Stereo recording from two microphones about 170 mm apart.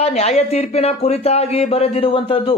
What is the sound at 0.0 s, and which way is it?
Speech, 40° left (ahead or behind).